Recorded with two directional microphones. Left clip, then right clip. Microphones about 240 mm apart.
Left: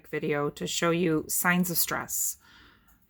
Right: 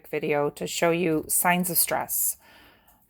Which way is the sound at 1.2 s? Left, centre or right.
Centre.